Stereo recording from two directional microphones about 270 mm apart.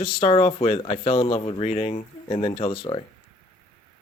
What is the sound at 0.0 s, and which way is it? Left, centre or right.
Speech, centre.